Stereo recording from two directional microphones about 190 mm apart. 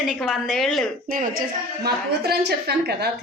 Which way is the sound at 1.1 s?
50° right (ahead or behind).